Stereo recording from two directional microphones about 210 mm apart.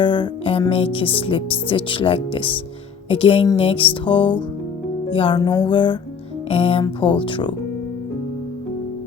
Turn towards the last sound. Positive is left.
turn(degrees=25)  # may be behind; listen again after turning